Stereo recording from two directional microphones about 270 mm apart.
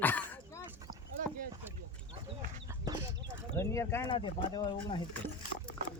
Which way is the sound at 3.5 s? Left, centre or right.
Centre.